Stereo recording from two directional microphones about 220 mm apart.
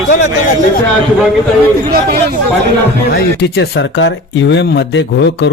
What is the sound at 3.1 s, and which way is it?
Speech, 50° left (ahead or behind).